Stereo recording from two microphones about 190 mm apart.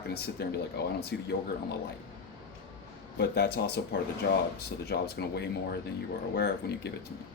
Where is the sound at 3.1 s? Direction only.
60° left (ahead or behind).